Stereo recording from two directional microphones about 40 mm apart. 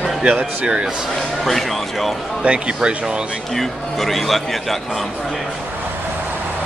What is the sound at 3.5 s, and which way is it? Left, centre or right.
Speech, centre.